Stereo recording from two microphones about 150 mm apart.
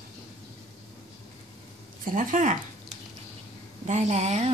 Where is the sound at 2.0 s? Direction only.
60° right (ahead or behind).